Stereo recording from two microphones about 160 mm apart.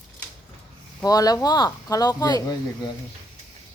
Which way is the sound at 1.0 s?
25° left (ahead or behind).